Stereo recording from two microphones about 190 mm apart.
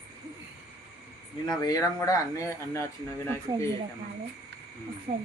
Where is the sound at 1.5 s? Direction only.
20° left (ahead or behind).